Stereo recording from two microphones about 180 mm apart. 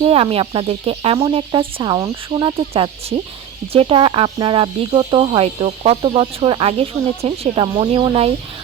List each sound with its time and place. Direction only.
0.0 s speech: 30° right (ahead or behind)